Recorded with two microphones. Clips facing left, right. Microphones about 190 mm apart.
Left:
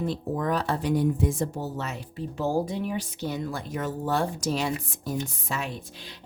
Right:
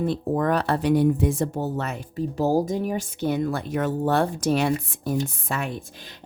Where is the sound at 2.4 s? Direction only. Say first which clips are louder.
Right 4 dB; 40° right (ahead or behind).